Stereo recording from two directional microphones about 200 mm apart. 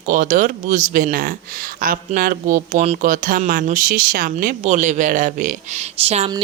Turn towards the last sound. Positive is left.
turn(degrees=-30)  # may be behind; listen again after turning